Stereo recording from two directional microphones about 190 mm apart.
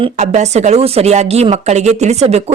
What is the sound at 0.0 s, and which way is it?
Speech, 35° right (ahead or behind).